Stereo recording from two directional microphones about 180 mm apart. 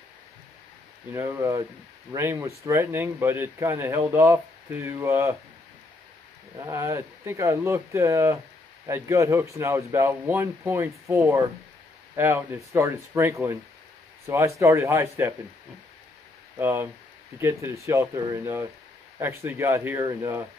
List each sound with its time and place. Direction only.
1.1 s speech: 15° right (ahead or behind)
6.5 s speech: 15° right (ahead or behind)
16.5 s speech: 10° right (ahead or behind)